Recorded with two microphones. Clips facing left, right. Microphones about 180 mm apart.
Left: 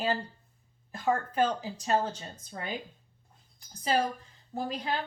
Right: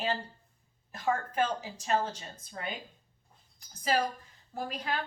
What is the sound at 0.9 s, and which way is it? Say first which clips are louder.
Speech: left 2 dB; 30° left (ahead or behind).